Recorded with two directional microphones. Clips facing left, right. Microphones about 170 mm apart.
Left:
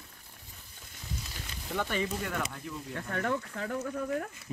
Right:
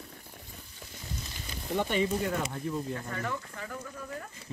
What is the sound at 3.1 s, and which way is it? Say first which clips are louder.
Speech: left 4 dB; 65° left (ahead or behind).